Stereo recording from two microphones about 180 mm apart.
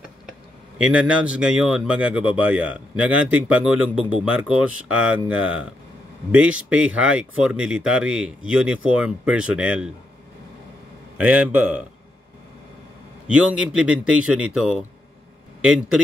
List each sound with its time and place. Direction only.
0.8 s speech: 5° right (ahead or behind)
11.1 s speech: 10° right (ahead or behind)
13.3 s speech: 5° right (ahead or behind)